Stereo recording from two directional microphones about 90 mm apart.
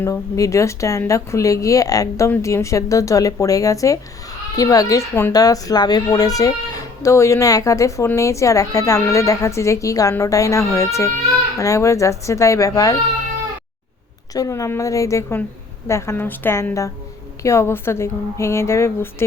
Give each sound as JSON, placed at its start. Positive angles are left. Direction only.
{"t": 0.0, "sound": "speech", "side_deg": 35}
{"t": 14.3, "sound": "a woman's voice", "side_deg": 40}